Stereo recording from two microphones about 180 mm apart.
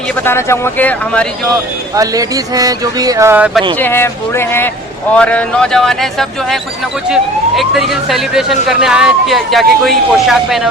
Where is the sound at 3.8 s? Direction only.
10° left (ahead or behind).